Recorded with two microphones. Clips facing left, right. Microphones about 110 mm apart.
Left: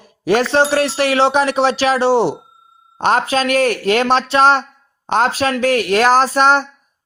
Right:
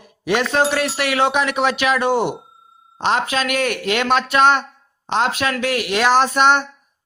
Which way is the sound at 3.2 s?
35° left (ahead or behind).